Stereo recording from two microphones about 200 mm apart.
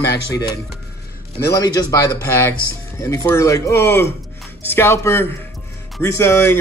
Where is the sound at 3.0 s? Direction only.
15° left (ahead or behind).